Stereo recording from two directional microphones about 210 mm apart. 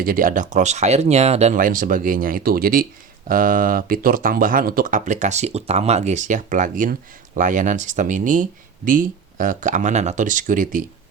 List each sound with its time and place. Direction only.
0.0 s speech: 40° right (ahead or behind)